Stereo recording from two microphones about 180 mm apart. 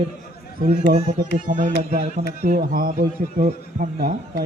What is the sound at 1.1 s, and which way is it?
A man's voice, 50° right (ahead or behind).